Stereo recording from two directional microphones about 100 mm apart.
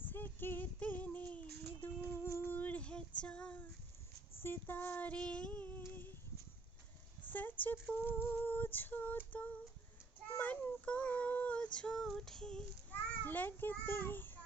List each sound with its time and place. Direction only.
0.0 s music: 20° left (ahead or behind)
4.4 s female singing: 20° left (ahead or behind)
7.3 s a sound: 15° left (ahead or behind)
7.6 s female singing: 20° left (ahead or behind)
10.3 s child singing: 15° left (ahead or behind)